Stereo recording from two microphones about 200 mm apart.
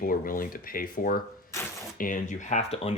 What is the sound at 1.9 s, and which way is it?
Speech, 45° left (ahead or behind).